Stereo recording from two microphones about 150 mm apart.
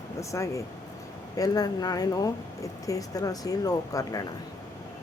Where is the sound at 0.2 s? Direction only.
20° left (ahead or behind).